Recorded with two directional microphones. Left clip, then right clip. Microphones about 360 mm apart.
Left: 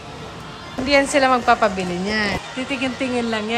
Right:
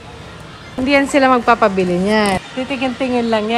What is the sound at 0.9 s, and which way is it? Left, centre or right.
A woman's voice, centre.